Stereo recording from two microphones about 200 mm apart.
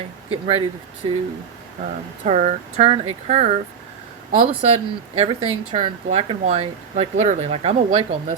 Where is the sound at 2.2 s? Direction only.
35° right (ahead or behind).